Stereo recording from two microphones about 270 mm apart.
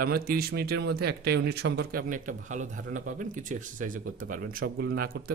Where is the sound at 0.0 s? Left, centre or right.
Right.